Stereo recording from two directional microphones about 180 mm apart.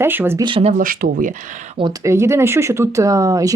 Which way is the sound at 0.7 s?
50° right (ahead or behind).